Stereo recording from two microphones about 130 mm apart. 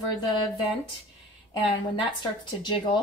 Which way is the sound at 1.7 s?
35° left (ahead or behind).